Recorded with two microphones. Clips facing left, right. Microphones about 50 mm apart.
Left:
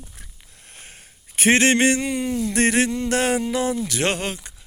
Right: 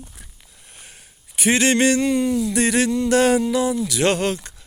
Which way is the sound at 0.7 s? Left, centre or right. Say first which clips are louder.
Left 1 dB; left.